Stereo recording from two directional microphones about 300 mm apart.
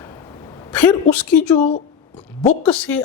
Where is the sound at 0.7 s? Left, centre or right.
Centre.